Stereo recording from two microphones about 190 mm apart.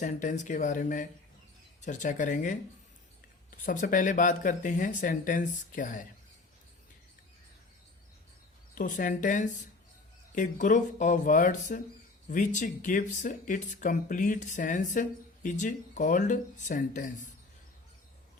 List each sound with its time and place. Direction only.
0.0 s speech: 40° left (ahead or behind)
8.7 s speech: 45° left (ahead or behind)